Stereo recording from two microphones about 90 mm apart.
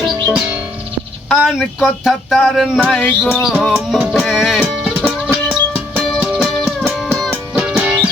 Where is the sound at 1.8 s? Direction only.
Centre (ahead or behind).